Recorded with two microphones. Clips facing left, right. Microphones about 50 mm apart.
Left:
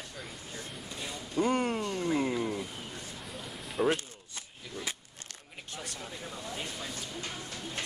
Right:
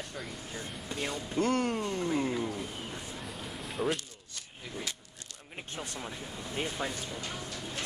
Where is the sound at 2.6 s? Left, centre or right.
Centre.